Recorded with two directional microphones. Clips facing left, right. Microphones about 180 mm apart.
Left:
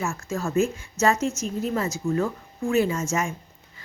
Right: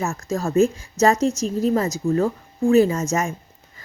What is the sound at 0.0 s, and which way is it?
A woman's voice, 40° right (ahead or behind).